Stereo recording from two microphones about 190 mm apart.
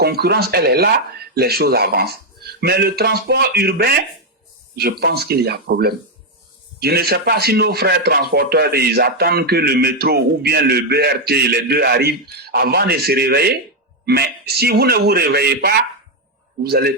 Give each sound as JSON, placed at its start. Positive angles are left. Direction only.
{"t": 0.0, "sound": "speech", "side_deg": -55}